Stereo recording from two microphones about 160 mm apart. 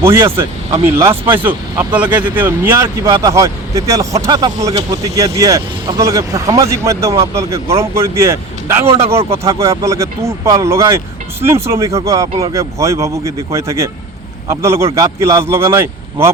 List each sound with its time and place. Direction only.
0.0 s speech: 15° right (ahead or behind)